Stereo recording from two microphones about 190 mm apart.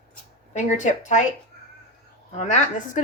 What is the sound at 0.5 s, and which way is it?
Speech, 40° left (ahead or behind).